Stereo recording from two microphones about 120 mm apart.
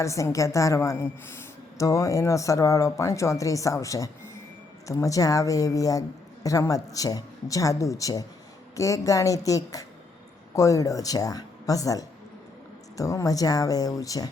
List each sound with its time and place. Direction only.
0.0 s a woman's voice: 25° left (ahead or behind)